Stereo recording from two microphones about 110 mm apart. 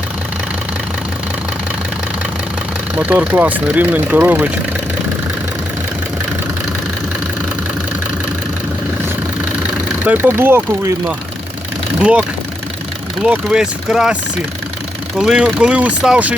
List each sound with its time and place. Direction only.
3.0 s speech: 15° right (ahead or behind)
10.1 s speech: 20° right (ahead or behind)
11.9 s speech: 10° right (ahead or behind)
13.2 s speech: 5° right (ahead or behind)
15.2 s speech: 5° right (ahead or behind)